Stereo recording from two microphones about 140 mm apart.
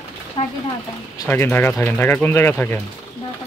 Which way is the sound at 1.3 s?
15° left (ahead or behind).